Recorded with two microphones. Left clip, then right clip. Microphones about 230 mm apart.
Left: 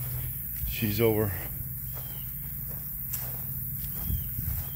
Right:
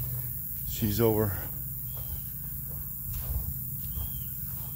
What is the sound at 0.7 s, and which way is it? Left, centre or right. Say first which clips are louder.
Speech: left 1 dB; centre.